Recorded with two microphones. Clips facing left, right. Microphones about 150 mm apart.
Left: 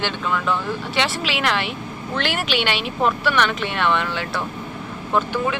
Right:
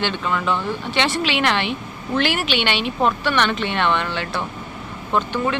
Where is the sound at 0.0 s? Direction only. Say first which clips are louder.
Right 1 dB; centre (ahead or behind).